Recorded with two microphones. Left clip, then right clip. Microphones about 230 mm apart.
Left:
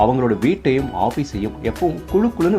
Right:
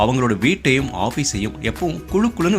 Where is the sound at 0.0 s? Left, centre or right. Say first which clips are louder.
Left 1 dB; right.